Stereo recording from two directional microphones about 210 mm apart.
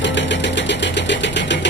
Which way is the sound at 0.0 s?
55° left (ahead or behind).